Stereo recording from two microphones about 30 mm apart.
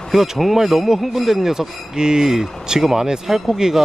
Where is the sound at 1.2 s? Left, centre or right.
Centre.